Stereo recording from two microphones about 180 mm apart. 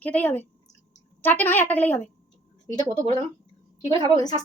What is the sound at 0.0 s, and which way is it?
A woman's voice, 10° left (ahead or behind).